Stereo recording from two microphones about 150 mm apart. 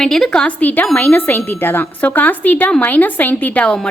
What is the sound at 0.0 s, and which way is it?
A woman's voice, 5° left (ahead or behind).